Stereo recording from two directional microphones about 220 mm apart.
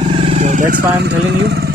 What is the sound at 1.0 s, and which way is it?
Speech, 50° right (ahead or behind).